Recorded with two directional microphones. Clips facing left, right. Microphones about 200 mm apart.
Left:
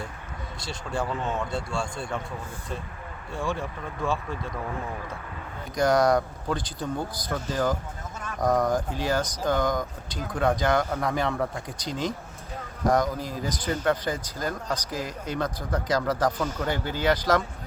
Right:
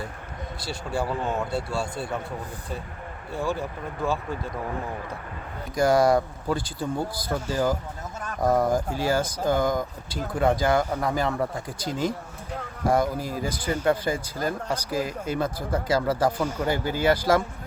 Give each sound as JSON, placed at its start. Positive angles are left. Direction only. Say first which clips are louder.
{"t": 0.6, "sound": "speech", "louder": "right 2 dB", "side_deg": -5}
{"t": 3.3, "sound": "speech", "louder": "right 2 dB", "side_deg": -5}
{"t": 5.7, "sound": "speech", "louder": "right 2 dB", "side_deg": -5}
{"t": 12.9, "sound": "speech", "louder": "right 1 dB", "side_deg": -10}